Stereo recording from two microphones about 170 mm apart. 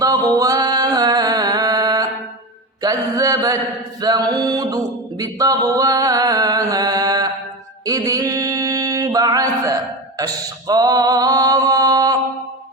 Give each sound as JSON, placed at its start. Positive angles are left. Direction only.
{"t": 0.0, "sound": "music", "side_deg": -20}
{"t": 2.8, "sound": "a sound", "side_deg": -20}
{"t": 7.9, "sound": "mantra", "side_deg": -20}
{"t": 10.2, "sound": "male singing", "side_deg": -20}